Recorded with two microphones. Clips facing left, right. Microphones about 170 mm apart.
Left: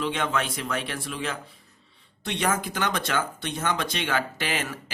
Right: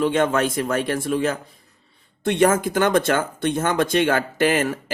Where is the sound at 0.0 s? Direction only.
45° right (ahead or behind).